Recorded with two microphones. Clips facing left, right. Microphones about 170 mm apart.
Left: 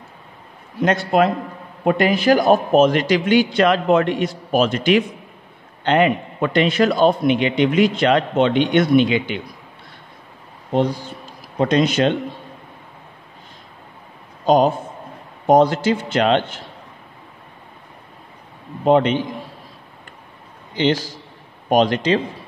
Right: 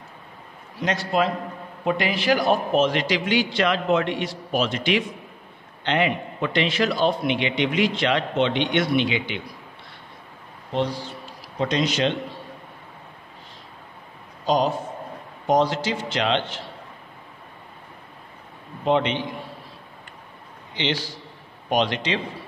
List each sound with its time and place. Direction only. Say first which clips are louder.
0.7 s a man's voice: left 6 dB; 55° left (ahead or behind)
10.7 s speech: left 6 dB; 50° left (ahead or behind)
14.4 s a man's voice: left 6 dB; 50° left (ahead or behind)
18.9 s a man's voice: left 6 dB; 45° left (ahead or behind)
20.7 s a man's voice: left 8 dB; 45° left (ahead or behind)